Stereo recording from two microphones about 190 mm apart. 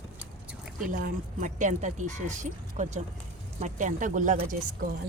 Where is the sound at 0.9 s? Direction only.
45° right (ahead or behind).